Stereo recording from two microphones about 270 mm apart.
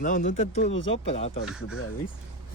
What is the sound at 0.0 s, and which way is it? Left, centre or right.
Speech, left.